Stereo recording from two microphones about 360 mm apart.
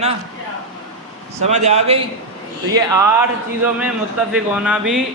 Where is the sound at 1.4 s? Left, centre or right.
Centre.